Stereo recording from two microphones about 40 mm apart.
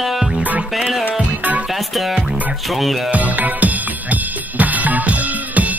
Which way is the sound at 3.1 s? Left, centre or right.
Right.